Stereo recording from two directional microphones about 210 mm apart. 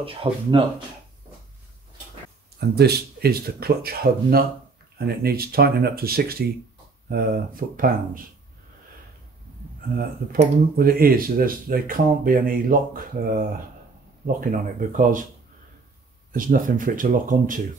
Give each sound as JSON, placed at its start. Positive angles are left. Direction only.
{"t": 0.0, "sound": "speech", "side_deg": -25}
{"t": 2.7, "sound": "speech", "side_deg": -50}
{"t": 9.9, "sound": "speech", "side_deg": -45}
{"t": 16.3, "sound": "speech", "side_deg": -40}